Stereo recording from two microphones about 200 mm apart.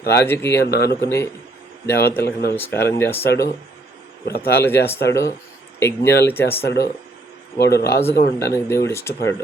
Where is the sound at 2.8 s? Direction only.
10° left (ahead or behind).